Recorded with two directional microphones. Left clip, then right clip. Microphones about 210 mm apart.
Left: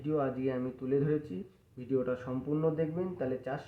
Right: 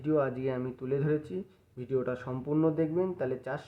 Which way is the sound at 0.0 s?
45° right (ahead or behind).